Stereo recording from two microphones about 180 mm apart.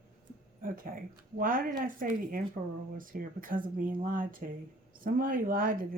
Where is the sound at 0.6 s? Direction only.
50° right (ahead or behind).